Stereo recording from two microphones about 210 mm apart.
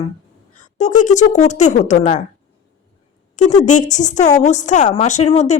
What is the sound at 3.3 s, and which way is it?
A woman's voice, 35° left (ahead or behind).